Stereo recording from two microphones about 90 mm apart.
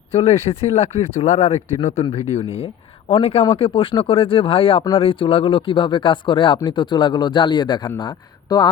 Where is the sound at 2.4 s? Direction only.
90° left.